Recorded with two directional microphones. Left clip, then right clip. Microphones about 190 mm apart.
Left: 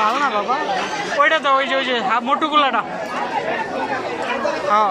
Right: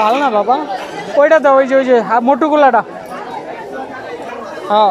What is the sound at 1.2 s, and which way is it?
A man's voice, 60° right (ahead or behind).